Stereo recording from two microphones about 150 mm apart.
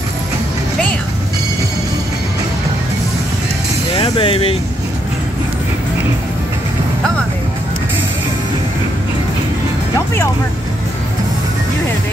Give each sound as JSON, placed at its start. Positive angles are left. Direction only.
{"t": 3.9, "sound": "vehicle", "side_deg": 35}